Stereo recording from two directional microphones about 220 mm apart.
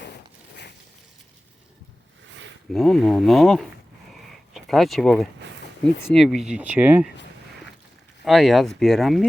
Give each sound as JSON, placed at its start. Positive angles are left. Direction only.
{"t": 2.7, "sound": "speech", "side_deg": 0}
{"t": 8.2, "sound": "speech", "side_deg": 0}